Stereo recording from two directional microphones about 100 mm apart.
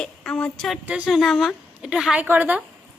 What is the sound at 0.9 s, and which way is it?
Speech, 15° right (ahead or behind).